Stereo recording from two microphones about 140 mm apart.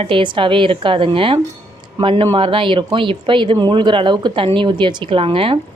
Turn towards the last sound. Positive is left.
turn(degrees=-40)  # may be behind; listen again after turning